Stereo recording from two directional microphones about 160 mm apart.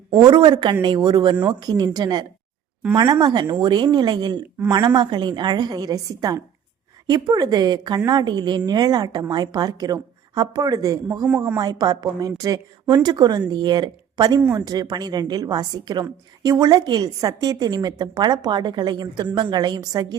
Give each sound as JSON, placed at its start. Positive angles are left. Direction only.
{"t": 0.2, "sound": "a woman's voice", "side_deg": -30}